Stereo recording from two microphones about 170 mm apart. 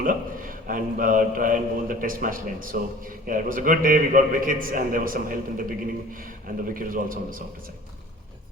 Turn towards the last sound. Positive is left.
turn(degrees=-55)  # may be behind; listen again after turning